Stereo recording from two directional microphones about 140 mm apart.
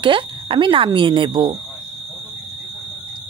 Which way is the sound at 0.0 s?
35° right (ahead or behind).